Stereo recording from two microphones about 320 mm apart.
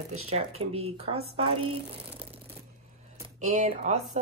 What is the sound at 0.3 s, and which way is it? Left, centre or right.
Speech, centre.